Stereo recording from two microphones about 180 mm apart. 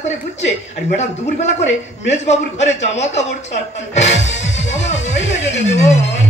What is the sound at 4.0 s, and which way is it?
Music, 40° left (ahead or behind).